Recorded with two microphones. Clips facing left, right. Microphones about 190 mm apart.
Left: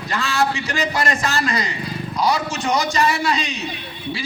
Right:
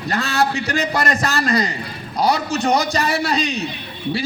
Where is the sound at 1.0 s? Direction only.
40° right (ahead or behind).